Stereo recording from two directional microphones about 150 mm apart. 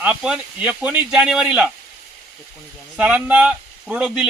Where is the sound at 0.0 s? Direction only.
5° right (ahead or behind).